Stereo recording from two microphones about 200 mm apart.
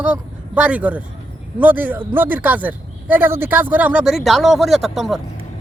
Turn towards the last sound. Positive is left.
turn(degrees=0)  # may be behind; listen again after turning